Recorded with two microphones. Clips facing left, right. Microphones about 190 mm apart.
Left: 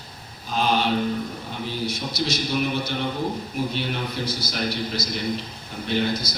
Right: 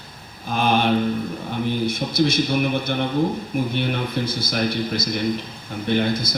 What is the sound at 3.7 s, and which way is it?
A man's voice, 55° right (ahead or behind).